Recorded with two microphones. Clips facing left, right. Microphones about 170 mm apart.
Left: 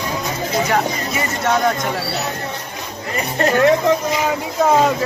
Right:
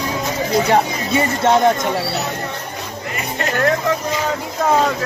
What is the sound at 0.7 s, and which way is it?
Speech, 25° right (ahead or behind).